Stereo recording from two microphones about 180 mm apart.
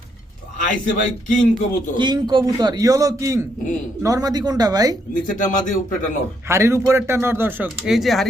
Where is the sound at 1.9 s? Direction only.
25° right (ahead or behind).